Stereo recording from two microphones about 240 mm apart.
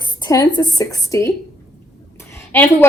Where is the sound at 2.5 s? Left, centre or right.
Centre.